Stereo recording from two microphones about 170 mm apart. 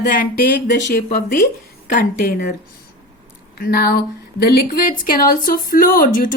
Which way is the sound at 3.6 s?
60° left (ahead or behind).